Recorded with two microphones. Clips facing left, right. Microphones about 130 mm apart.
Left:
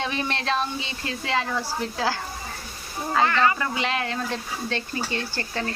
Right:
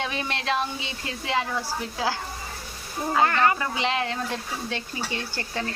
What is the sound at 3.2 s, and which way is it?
Speech, 50° right (ahead or behind).